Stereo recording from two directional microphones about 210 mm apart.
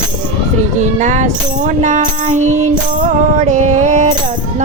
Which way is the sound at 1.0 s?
35° right (ahead or behind).